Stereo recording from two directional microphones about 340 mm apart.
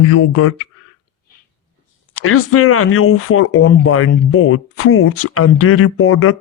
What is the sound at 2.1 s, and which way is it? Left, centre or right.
Speech, left.